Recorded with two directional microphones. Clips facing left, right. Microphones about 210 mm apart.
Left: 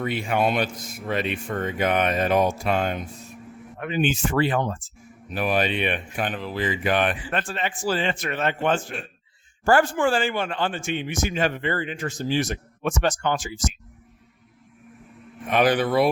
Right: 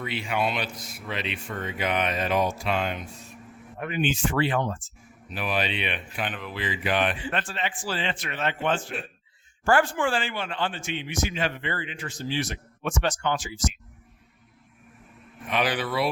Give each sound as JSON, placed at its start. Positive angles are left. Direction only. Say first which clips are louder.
{"t": 0.0, "sound": "a man's voice", "louder": "left 5 dB", "side_deg": 50}
{"t": 4.0, "sound": "a man's voice", "louder": "left 3 dB", "side_deg": 45}
{"t": 15.4, "sound": "a man's voice", "louder": "left 7 dB", "side_deg": 50}